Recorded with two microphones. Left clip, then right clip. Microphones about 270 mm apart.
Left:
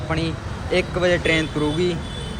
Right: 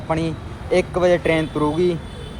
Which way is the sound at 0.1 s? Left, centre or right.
Right.